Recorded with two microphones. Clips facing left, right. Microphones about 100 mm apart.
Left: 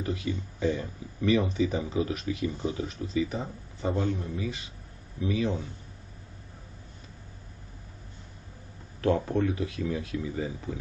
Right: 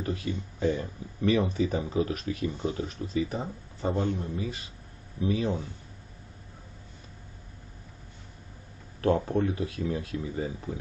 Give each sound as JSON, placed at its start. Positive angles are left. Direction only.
{"t": 0.0, "sound": "speech", "side_deg": -40}
{"t": 9.3, "sound": "speech", "side_deg": -25}